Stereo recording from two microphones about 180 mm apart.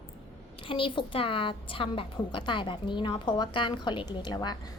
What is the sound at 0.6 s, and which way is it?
A woman's voice, 30° left (ahead or behind).